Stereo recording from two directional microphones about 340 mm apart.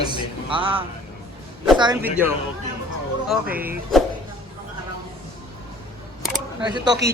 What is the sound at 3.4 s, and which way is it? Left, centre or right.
Speech, right.